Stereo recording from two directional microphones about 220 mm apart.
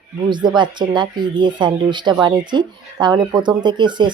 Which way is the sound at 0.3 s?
20° right (ahead or behind).